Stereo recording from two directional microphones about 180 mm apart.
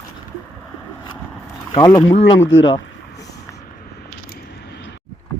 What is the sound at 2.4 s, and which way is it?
Speech, 90° left.